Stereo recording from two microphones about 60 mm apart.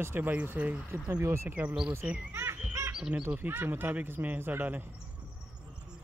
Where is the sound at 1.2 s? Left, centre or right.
Right.